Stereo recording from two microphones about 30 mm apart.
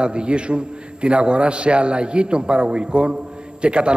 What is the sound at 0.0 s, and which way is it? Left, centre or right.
A man's voice, right.